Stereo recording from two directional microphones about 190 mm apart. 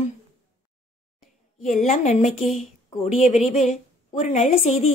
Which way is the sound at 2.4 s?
Centre (ahead or behind).